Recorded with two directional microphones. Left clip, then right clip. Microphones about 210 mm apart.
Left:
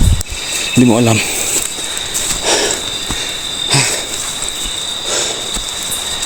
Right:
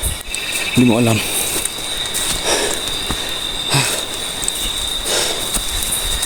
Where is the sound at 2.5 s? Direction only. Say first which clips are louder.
Left 4 dB; 20° left (ahead or behind).